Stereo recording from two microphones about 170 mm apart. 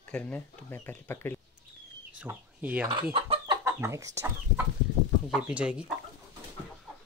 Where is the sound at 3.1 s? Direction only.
30° right (ahead or behind).